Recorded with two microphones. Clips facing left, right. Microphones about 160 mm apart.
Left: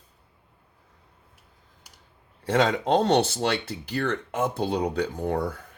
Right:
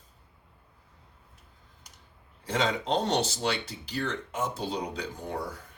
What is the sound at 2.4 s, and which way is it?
Speech, 60° left (ahead or behind).